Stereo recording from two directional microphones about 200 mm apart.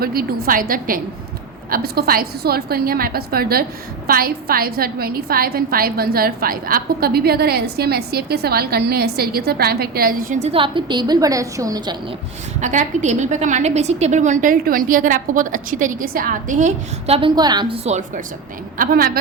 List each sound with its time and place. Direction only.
0.0 s a woman's voice: 50° right (ahead or behind); by 11.9 s 20° right (ahead or behind)
12.5 s a woman's voice: 35° right (ahead or behind); by 17.7 s 20° right (ahead or behind)
17.8 s a woman's voice: 35° right (ahead or behind)
18.8 s a woman's voice: 45° right (ahead or behind)